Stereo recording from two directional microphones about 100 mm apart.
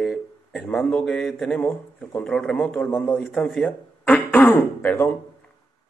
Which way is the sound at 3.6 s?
15° left (ahead or behind).